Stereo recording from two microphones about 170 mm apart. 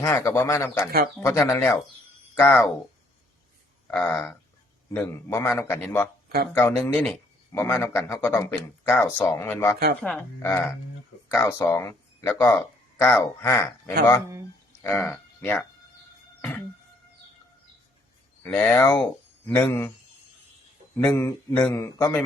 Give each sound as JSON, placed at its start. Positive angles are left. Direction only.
{"t": 0.0, "sound": "speech", "side_deg": 15}
{"t": 3.8, "sound": "speech", "side_deg": 15}
{"t": 6.2, "sound": "a sound", "side_deg": -70}
{"t": 6.7, "sound": "speech", "side_deg": 15}
{"t": 16.4, "sound": "music", "side_deg": 10}
{"t": 18.4, "sound": "speech", "side_deg": 10}
{"t": 20.9, "sound": "speech", "side_deg": 10}